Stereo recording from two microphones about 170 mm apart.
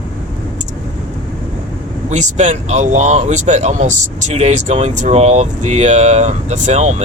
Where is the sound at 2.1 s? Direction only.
45° right (ahead or behind).